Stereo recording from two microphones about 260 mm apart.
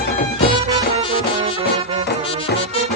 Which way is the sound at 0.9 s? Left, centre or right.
Right.